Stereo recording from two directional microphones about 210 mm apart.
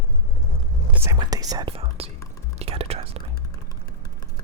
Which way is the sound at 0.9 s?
15° right (ahead or behind).